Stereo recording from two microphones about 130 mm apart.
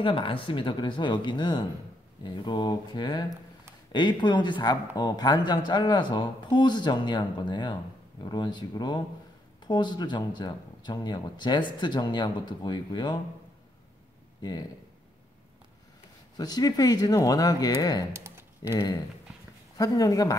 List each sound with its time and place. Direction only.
0.0 s speech: 40° left (ahead or behind)
14.4 s speech: 30° left (ahead or behind)
16.3 s speech: 30° left (ahead or behind)
18.1 s typing: 20° right (ahead or behind)
19.8 s speech: 30° left (ahead or behind)